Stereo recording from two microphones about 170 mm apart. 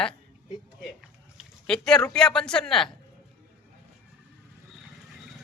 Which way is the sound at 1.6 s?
5° left (ahead or behind).